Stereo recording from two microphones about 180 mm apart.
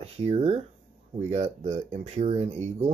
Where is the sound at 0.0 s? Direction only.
35° right (ahead or behind).